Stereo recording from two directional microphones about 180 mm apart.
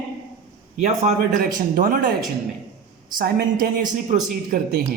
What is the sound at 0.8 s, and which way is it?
Speech, 40° right (ahead or behind).